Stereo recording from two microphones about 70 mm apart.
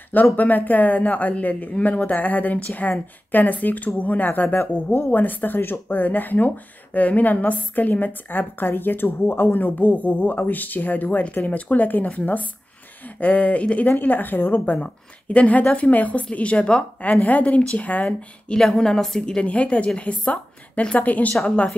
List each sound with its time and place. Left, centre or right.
0.1 s speech: left
18.0 s a woman's voice: centre